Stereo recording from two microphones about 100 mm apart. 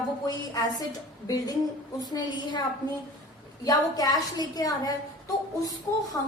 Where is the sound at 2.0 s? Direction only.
45° left (ahead or behind).